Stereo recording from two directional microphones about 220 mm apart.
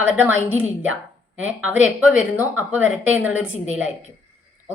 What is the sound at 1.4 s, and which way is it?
A woman's voice, 5° right (ahead or behind).